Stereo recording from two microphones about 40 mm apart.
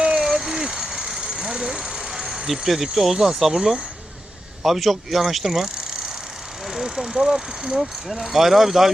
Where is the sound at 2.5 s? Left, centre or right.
Centre.